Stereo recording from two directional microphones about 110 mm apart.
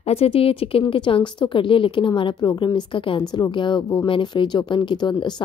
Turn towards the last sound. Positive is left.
turn(degrees=45)  # may be behind; listen again after turning